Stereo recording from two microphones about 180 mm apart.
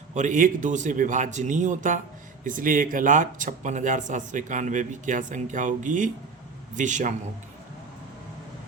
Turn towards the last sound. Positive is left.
turn(degrees=-45)  # may be behind; listen again after turning